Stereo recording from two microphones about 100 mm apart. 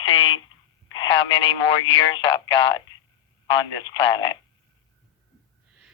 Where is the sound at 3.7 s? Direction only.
45° left (ahead or behind).